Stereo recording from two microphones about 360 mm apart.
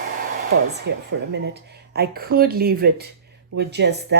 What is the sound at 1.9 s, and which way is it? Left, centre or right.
Speech, right.